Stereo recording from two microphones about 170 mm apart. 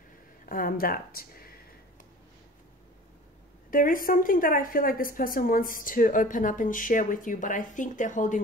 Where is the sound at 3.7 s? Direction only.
55° left (ahead or behind).